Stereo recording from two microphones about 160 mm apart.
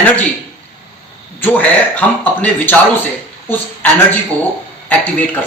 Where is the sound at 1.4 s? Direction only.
10° left (ahead or behind).